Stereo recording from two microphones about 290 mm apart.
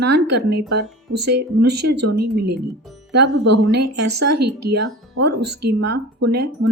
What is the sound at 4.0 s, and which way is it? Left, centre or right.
Speech, right.